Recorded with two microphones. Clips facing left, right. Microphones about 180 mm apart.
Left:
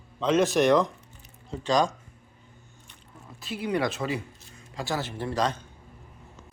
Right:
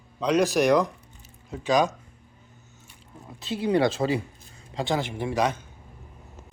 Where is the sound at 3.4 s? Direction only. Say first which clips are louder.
Right 5 dB; 25° right (ahead or behind).